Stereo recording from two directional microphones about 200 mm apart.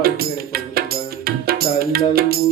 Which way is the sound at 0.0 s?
50° right (ahead or behind).